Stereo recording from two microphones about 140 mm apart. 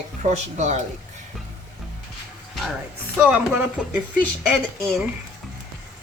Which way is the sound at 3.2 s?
10° right (ahead or behind).